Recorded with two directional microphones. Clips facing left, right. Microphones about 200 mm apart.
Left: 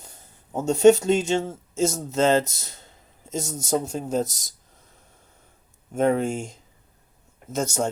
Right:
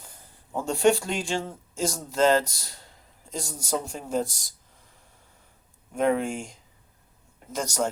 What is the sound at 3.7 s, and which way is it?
Speech, 40° left (ahead or behind).